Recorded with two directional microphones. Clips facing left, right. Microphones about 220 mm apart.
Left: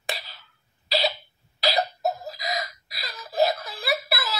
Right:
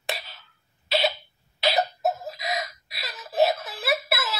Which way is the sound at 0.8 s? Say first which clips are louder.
Right 1 dB; centre (ahead or behind).